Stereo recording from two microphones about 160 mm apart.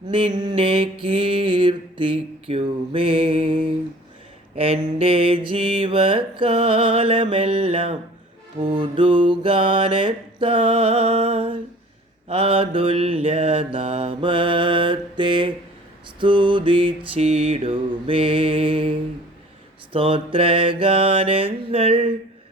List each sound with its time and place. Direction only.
0.1 s mantra: 30° right (ahead or behind)